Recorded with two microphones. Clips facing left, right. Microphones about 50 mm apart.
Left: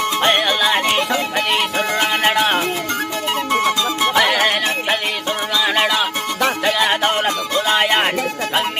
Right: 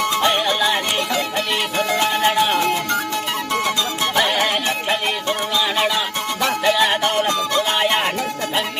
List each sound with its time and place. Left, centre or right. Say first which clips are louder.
0.2 s music: left 4 dB; left
2.2 s music: left 1 dB; left
4.1 s music: left 2 dB; left